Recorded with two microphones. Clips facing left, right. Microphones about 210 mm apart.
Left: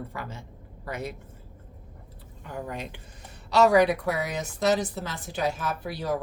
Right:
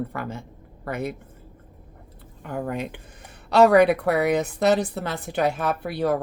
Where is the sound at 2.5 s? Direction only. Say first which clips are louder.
Right 7 dB; 55° right (ahead or behind).